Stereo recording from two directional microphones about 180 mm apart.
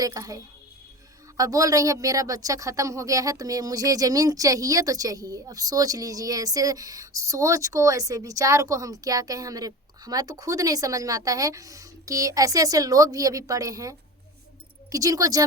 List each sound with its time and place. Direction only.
0.0 s speech: 20° right (ahead or behind)